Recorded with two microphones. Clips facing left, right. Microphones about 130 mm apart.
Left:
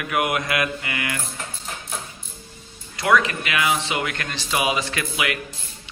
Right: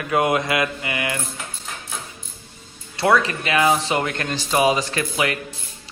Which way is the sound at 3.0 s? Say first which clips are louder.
Right 1 dB; 30° right (ahead or behind).